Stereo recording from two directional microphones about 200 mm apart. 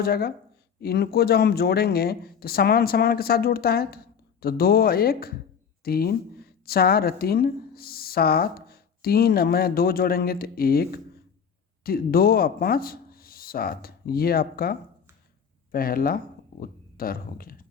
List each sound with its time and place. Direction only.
0.0 s a woman's voice: 50° left (ahead or behind)